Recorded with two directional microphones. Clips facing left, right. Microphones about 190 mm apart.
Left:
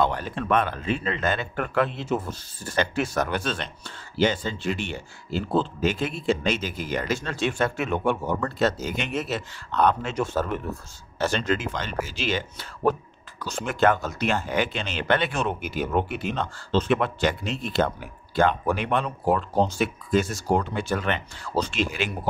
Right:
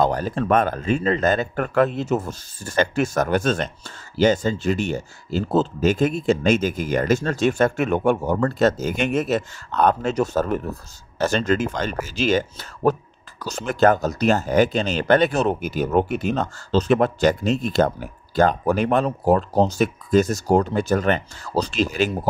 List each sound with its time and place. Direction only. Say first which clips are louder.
0.0 s speech: right 4 dB; 40° right (ahead or behind)